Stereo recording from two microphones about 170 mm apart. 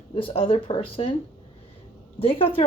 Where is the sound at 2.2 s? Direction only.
35° left (ahead or behind).